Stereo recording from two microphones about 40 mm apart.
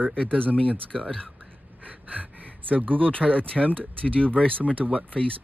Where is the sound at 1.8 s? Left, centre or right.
Right.